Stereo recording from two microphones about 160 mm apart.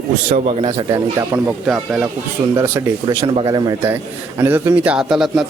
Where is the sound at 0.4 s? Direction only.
35° right (ahead or behind).